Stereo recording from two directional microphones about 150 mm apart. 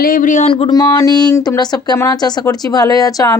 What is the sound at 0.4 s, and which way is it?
Speech, 40° left (ahead or behind).